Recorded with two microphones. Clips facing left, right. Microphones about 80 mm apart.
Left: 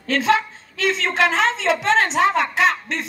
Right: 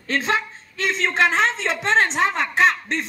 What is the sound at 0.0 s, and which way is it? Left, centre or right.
A woman's voice, right.